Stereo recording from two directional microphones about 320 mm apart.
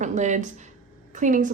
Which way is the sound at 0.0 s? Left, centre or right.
Right.